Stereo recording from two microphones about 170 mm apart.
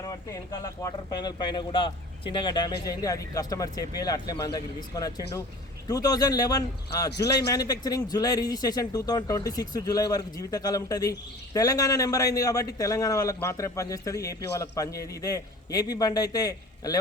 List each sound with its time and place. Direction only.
0.0 s a man's voice: 20° left (ahead or behind)